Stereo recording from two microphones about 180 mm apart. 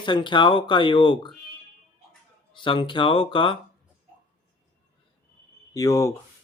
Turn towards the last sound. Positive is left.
turn(degrees=20)  # may be behind; listen again after turning